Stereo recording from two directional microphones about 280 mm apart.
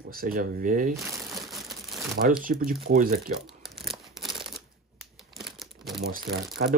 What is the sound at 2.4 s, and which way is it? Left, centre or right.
Speech, right.